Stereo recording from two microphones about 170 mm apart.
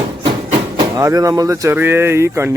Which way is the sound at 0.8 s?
20° right (ahead or behind).